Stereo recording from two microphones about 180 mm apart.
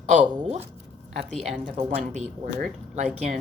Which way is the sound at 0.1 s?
40° right (ahead or behind).